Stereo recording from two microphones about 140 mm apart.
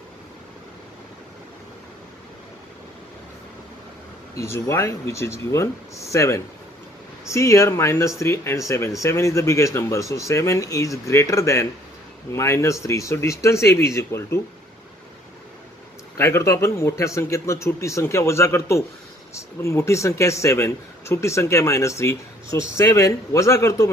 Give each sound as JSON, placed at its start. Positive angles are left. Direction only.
{"t": 4.4, "sound": "speech", "side_deg": 20}
{"t": 16.2, "sound": "speech", "side_deg": 20}